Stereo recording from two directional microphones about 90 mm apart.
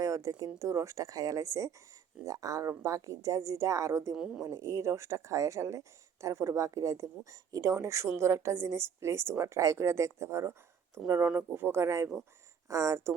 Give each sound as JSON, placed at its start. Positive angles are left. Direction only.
{"t": 0.0, "sound": "a woman's voice", "side_deg": -35}
{"t": 4.1, "sound": "speech", "side_deg": -5}
{"t": 4.4, "sound": "a woman's voice", "side_deg": -30}
{"t": 11.0, "sound": "speech", "side_deg": -15}
{"t": 11.5, "sound": "a woman's voice", "side_deg": -25}